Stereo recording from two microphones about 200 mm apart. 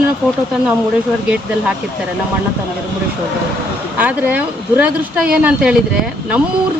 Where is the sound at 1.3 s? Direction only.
5° right (ahead or behind).